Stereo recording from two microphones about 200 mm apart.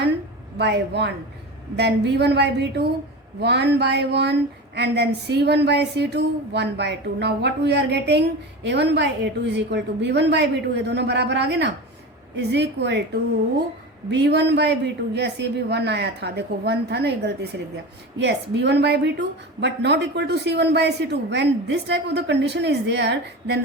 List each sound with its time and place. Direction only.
0.6 s speech: 55° right (ahead or behind)
14.1 s speech: 55° right (ahead or behind)